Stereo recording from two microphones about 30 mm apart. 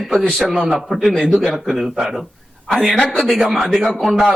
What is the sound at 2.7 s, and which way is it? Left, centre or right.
Speech, centre.